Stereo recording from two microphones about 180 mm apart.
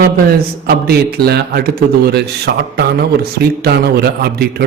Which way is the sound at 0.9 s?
60° right (ahead or behind).